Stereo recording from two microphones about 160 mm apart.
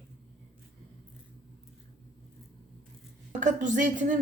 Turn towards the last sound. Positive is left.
turn(degrees=-55)  # may be behind; listen again after turning